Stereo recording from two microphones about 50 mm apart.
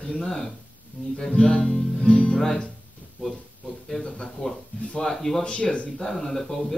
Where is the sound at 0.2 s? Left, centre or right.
Centre.